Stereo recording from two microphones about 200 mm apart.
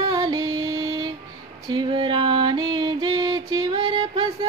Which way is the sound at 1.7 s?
25° right (ahead or behind).